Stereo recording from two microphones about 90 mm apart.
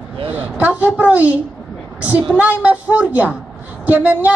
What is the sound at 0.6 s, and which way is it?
A woman's voice, 15° right (ahead or behind).